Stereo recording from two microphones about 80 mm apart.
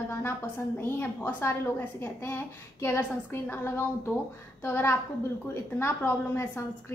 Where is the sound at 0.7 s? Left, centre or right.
Left.